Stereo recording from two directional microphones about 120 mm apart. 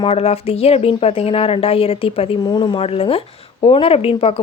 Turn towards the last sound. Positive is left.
turn(degrees=50)  # may be behind; listen again after turning